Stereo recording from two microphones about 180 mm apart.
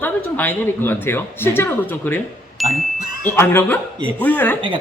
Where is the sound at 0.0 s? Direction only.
10° left (ahead or behind).